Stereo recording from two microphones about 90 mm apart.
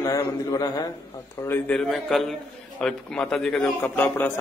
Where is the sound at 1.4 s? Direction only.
20° left (ahead or behind).